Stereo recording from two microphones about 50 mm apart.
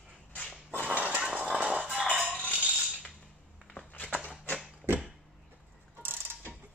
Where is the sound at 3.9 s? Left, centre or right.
Left.